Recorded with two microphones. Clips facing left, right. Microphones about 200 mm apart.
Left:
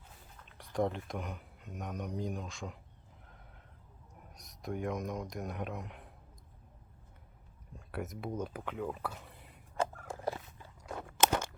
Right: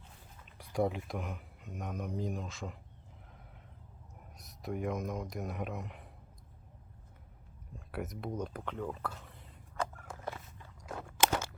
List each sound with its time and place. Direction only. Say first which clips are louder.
0.4 s speech: right 1 dB; 10° right (ahead or behind)
4.4 s speech: even; centre (ahead or behind)
7.8 s speech: even; centre (ahead or behind)
9.7 s biting: left 3 dB; 30° left (ahead or behind)
10.8 s crunch: left 1 dB; centre (ahead or behind)